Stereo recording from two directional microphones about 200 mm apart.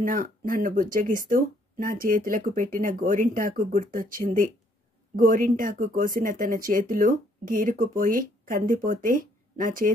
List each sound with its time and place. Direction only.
0.0 s speech: 45° right (ahead or behind)